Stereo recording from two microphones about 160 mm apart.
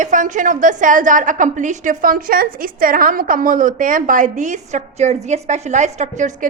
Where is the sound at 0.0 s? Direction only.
55° right (ahead or behind).